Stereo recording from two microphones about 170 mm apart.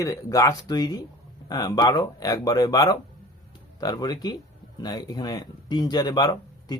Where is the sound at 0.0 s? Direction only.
20° left (ahead or behind).